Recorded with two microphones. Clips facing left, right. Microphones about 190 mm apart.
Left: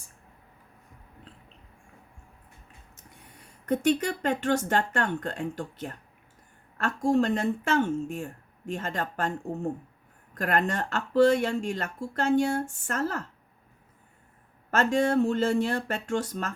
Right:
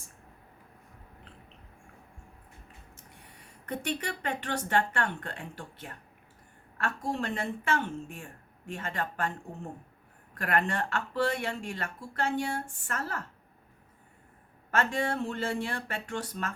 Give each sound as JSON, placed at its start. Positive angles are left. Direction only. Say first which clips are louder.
{"t": 3.7, "sound": "speech", "louder": "left 9 dB", "side_deg": 45}
{"t": 10.3, "sound": "speech", "louder": "left 3 dB", "side_deg": 40}
{"t": 14.7, "sound": "speech", "louder": "left 6 dB", "side_deg": 45}